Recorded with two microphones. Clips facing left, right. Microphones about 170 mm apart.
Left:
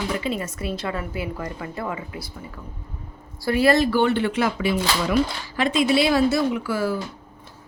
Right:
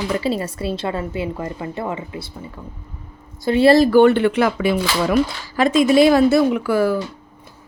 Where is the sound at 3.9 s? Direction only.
55° right (ahead or behind).